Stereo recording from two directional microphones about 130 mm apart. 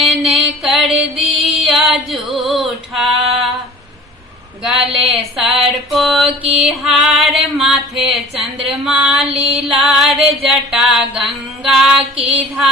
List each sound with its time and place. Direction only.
0.0 s music: 5° right (ahead or behind)
4.6 s music: 5° right (ahead or behind)
9.3 s music: 50° right (ahead or behind)
9.6 s music: centre (ahead or behind)